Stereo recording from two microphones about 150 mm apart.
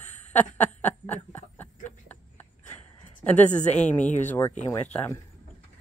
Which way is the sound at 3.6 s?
50° left (ahead or behind).